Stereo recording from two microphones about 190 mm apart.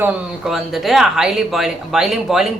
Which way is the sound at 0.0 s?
5° right (ahead or behind).